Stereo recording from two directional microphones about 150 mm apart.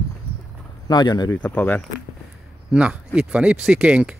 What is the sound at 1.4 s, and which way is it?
Speech, 10° left (ahead or behind).